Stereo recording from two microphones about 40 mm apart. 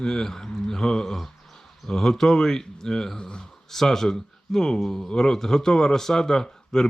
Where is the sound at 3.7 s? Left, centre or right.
Centre.